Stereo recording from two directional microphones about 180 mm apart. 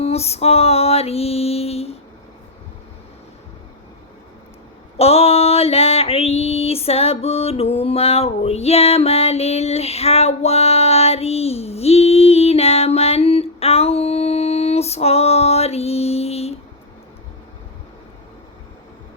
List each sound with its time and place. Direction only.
0.0 s music: 35° left (ahead or behind)
4.9 s female singing: 35° left (ahead or behind)